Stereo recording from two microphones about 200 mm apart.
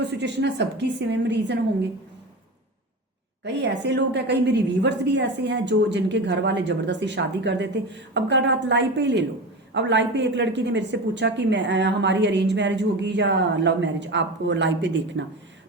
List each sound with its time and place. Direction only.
0.0 s a woman's voice: 60° right (ahead or behind)
3.4 s a woman's voice: 60° right (ahead or behind)